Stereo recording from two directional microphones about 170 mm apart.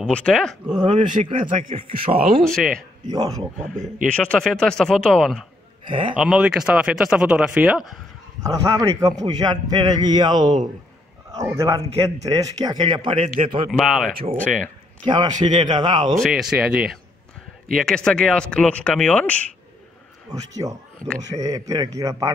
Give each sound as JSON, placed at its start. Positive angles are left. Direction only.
{"t": 0.0, "sound": "speech", "side_deg": 5}
{"t": 0.9, "sound": "speech", "side_deg": -45}
{"t": 2.4, "sound": "speech", "side_deg": 5}
{"t": 3.1, "sound": "a man's voice", "side_deg": -20}
{"t": 3.6, "sound": "speech", "side_deg": -45}
{"t": 4.0, "sound": "speech", "side_deg": 5}
{"t": 5.9, "sound": "a man's voice", "side_deg": -30}
{"t": 6.1, "sound": "speech", "side_deg": -5}
{"t": 8.4, "sound": "a man's voice", "side_deg": -20}
{"t": 13.7, "sound": "speech", "side_deg": 0}
{"t": 15.0, "sound": "a man's voice", "side_deg": -25}
{"t": 16.2, "sound": "speech", "side_deg": -5}
{"t": 20.2, "sound": "a man's voice", "side_deg": -20}